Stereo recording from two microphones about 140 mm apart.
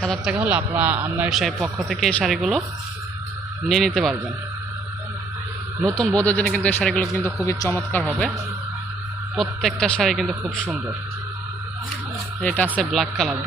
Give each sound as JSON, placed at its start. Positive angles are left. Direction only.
{"t": 0.3, "sound": "a man's voice", "side_deg": -10}
{"t": 1.3, "sound": "speech", "side_deg": 0}
{"t": 3.7, "sound": "speech", "side_deg": 0}
{"t": 5.8, "sound": "speech", "side_deg": 5}
{"t": 7.4, "sound": "a man's voice", "side_deg": 20}
{"t": 9.3, "sound": "speech", "side_deg": 0}
{"t": 12.4, "sound": "speech", "side_deg": 10}